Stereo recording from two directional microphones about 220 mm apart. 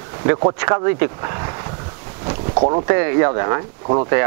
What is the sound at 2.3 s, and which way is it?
Boat, 25° right (ahead or behind).